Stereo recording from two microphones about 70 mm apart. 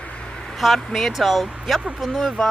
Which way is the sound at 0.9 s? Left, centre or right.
Centre.